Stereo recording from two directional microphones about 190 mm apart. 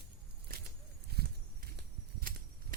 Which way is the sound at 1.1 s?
60° right (ahead or behind).